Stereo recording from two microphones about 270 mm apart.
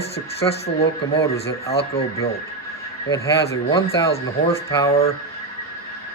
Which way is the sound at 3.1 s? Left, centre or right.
Centre.